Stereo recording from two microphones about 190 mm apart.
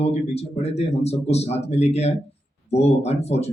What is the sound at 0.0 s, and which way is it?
Speech, 35° left (ahead or behind).